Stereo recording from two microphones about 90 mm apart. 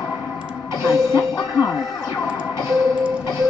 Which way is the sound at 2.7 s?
Centre (ahead or behind).